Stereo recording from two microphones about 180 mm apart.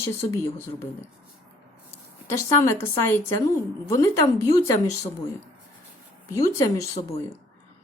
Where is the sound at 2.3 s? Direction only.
15° left (ahead or behind).